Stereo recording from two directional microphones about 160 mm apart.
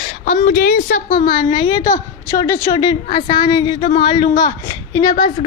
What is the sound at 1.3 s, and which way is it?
Speech, 35° left (ahead or behind).